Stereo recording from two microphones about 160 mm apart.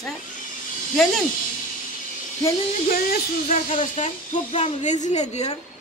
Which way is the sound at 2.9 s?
60° left (ahead or behind).